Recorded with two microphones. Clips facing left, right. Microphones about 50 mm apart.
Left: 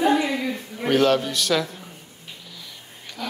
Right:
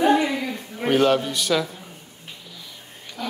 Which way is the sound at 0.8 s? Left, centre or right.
Centre.